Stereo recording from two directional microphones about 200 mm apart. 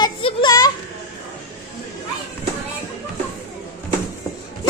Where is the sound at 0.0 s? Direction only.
25° left (ahead or behind).